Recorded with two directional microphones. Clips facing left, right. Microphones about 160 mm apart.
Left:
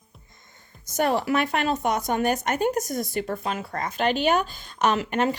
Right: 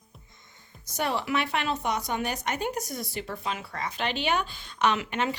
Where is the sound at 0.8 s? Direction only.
45° left (ahead or behind).